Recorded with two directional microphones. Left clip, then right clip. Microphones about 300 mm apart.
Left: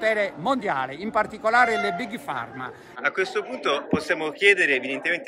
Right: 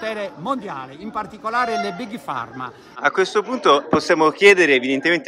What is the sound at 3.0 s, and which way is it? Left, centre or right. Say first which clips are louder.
A man's voice: right 6 dB; centre.